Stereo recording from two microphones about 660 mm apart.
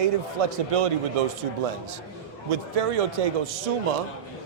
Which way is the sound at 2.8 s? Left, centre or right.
Right.